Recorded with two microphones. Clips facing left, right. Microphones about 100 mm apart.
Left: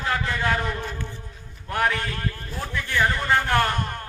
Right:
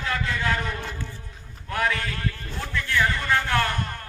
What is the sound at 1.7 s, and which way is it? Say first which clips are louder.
A man's voice: left 2 dB; 25° left (ahead or behind).